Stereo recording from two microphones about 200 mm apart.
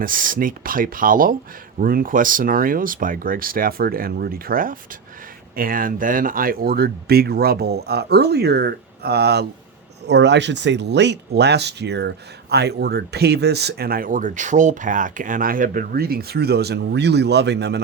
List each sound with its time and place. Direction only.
0.0 s speech: 45° right (ahead or behind)